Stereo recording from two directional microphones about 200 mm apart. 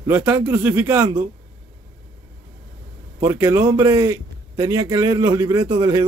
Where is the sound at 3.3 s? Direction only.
15° right (ahead or behind).